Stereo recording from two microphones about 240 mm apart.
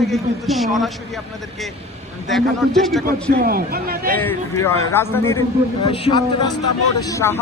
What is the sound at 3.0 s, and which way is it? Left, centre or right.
A man's voice, right.